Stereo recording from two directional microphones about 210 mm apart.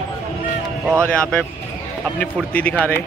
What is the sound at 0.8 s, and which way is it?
Speech, 10° right (ahead or behind).